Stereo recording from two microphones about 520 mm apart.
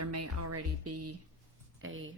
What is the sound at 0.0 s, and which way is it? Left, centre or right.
Music, right.